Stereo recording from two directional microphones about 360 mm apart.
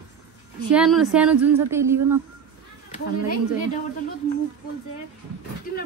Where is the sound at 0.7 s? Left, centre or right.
Centre.